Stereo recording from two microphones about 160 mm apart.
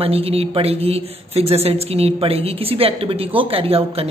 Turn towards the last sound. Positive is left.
turn(degrees=-35)  # may be behind; listen again after turning